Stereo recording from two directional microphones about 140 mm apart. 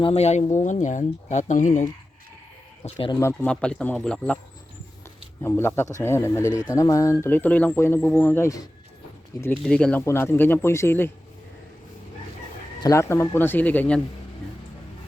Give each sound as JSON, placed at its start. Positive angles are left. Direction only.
{"t": 0.0, "sound": "speech", "side_deg": 45}
{"t": 0.5, "sound": "speech", "side_deg": 60}
{"t": 2.8, "sound": "speech", "side_deg": 50}
{"t": 3.4, "sound": "speech", "side_deg": 5}
{"t": 5.4, "sound": "speech", "side_deg": 15}
{"t": 9.6, "sound": "speech", "side_deg": 5}
{"t": 12.8, "sound": "speech", "side_deg": 20}